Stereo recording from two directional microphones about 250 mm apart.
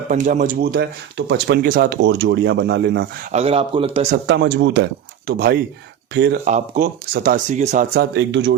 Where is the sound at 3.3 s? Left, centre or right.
Right.